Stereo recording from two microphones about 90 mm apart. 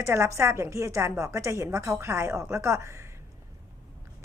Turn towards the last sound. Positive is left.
turn(degrees=-30)  # may be behind; listen again after turning